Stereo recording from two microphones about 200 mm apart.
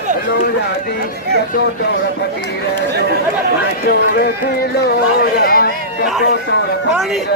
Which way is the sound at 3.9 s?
50° left (ahead or behind).